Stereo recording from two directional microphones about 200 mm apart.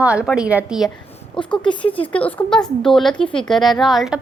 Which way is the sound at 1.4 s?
25° left (ahead or behind).